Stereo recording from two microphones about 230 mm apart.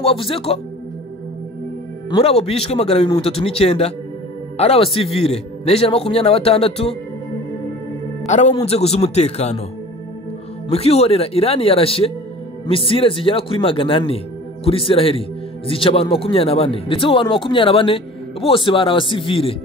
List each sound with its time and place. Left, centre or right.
0.0 s speech: left
2.0 s speech: left
8.3 s speech: left
10.7 s speech: left